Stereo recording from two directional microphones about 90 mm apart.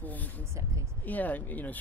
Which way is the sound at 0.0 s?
20° left (ahead or behind).